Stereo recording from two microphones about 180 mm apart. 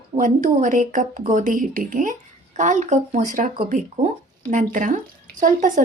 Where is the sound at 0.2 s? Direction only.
45° right (ahead or behind).